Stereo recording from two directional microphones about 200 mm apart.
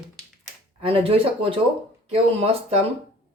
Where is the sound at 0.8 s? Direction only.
30° right (ahead or behind).